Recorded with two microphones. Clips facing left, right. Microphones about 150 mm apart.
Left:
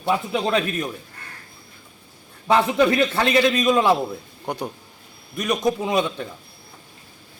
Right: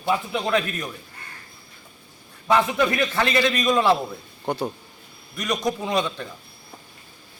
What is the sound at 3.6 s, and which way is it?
A man's voice, 5° left (ahead or behind).